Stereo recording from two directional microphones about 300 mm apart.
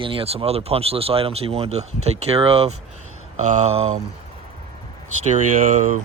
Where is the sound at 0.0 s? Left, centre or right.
Centre.